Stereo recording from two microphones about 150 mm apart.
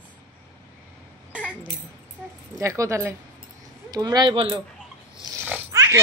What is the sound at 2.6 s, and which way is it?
A woman's voice, 20° right (ahead or behind).